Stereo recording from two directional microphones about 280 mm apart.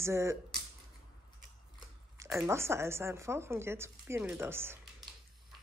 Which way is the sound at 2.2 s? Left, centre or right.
Centre.